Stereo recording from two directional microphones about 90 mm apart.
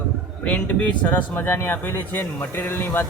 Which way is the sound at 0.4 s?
15° left (ahead or behind).